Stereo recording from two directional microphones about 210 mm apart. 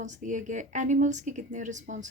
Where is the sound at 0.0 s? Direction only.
35° right (ahead or behind).